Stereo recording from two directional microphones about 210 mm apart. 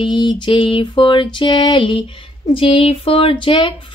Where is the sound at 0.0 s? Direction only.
20° left (ahead or behind).